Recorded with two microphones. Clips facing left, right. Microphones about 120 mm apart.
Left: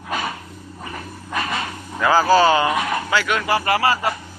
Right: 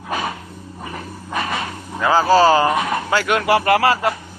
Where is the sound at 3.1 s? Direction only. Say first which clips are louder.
Right 3 dB; 45° right (ahead or behind).